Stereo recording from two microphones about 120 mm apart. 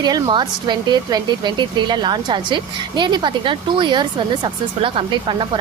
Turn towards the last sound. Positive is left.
turn(degrees=-45)  # may be behind; listen again after turning